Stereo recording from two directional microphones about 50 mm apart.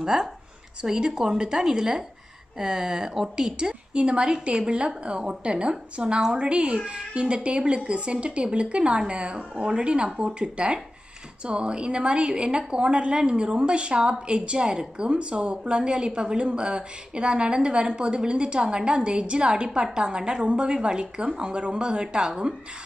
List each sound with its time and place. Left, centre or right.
0.0 s a woman's voice: centre